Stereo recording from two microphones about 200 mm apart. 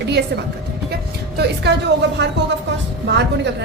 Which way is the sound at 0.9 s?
55° right (ahead or behind).